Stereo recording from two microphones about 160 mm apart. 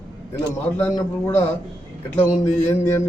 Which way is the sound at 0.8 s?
15° left (ahead or behind).